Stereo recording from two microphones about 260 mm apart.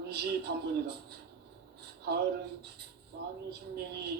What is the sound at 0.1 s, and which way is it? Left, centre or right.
Speech, right.